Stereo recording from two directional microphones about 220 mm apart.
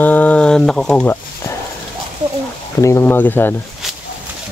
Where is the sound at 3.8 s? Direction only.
Centre (ahead or behind).